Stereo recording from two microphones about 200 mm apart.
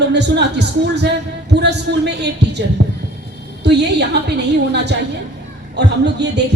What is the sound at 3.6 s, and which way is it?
Speech, 55° right (ahead or behind).